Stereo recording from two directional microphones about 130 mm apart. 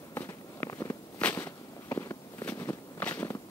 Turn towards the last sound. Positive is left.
turn(degrees=15)  # may be behind; listen again after turning